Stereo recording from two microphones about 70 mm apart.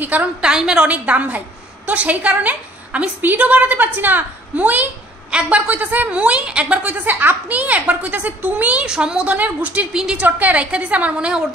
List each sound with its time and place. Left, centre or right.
0.0 s a woman's voice: right
0.5 s a woman's voice: centre
8.8 s a woman's voice: centre
9.9 s a woman's voice: centre
10.2 s a woman's voice: right